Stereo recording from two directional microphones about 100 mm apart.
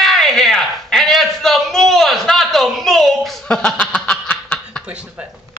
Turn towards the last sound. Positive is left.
turn(degrees=10)  # may be behind; listen again after turning